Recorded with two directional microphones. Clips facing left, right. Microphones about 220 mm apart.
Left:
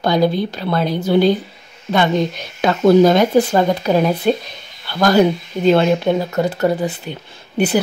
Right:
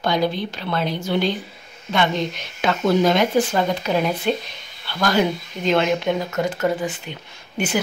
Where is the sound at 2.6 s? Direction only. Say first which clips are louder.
Left 7 dB; 40° left (ahead or behind).